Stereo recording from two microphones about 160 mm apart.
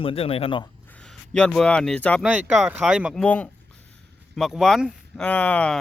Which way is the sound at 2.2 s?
5° right (ahead or behind).